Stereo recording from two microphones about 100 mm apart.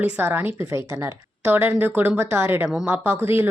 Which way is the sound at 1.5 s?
20° right (ahead or behind).